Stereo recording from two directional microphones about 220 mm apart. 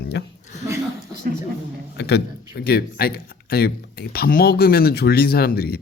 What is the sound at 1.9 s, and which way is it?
A man's voice, 50° left (ahead or behind).